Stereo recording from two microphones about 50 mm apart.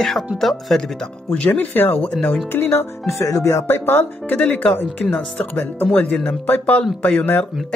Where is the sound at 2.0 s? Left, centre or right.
Left.